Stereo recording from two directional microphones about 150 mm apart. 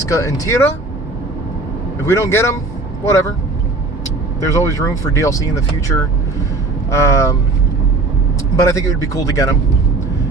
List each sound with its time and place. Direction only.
0.1 s speech: 20° left (ahead or behind)
2.0 s speech: 20° left (ahead or behind)
4.4 s speech: 20° left (ahead or behind)
6.9 s speech: 20° left (ahead or behind)
8.6 s speech: 20° left (ahead or behind)